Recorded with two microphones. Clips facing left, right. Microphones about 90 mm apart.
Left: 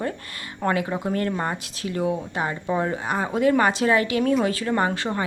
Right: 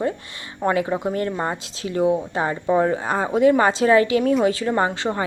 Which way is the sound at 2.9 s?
30° right (ahead or behind).